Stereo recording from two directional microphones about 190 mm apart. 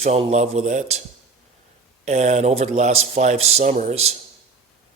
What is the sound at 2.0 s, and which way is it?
Speech, 35° right (ahead or behind).